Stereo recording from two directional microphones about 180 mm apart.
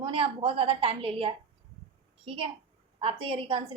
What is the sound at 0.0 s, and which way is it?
A woman's voice, 30° right (ahead or behind).